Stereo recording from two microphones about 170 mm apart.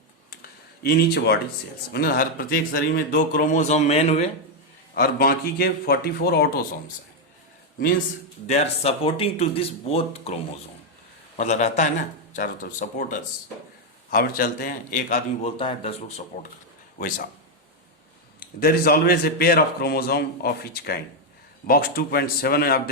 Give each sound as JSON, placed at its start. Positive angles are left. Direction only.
{"t": 0.8, "sound": "speech", "side_deg": 70}
{"t": 1.9, "sound": "speech", "side_deg": 60}
{"t": 4.9, "sound": "a man's voice", "side_deg": 60}
{"t": 8.4, "sound": "speech", "side_deg": 40}
{"t": 14.1, "sound": "a man's voice", "side_deg": 60}
{"t": 15.4, "sound": "speech", "side_deg": 30}
{"t": 18.3, "sound": "a man's voice", "side_deg": 65}